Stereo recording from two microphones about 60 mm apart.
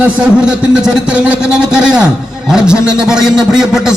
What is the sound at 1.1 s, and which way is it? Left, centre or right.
A man's voice, centre.